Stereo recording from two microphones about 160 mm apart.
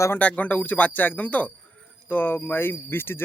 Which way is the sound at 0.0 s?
10° left (ahead or behind).